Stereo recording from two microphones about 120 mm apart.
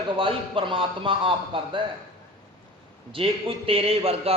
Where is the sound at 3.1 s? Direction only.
50° right (ahead or behind).